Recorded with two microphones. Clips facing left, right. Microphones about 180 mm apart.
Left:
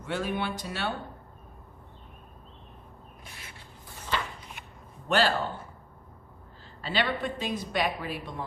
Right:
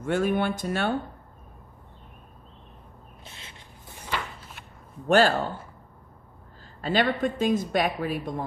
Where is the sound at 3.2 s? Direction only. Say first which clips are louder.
Right 2 dB; 25° right (ahead or behind).